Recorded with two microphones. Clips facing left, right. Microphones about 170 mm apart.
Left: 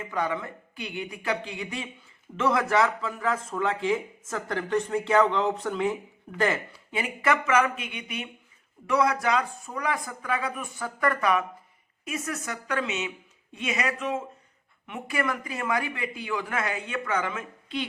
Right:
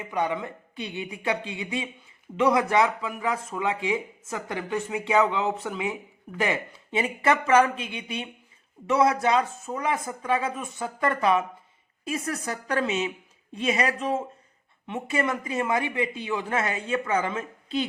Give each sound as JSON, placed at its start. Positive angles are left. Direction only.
{"t": 0.0, "sound": "speech", "side_deg": -20}
{"t": 6.9, "sound": "speech", "side_deg": -30}